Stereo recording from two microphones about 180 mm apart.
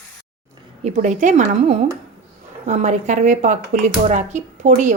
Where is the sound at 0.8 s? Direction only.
45° right (ahead or behind).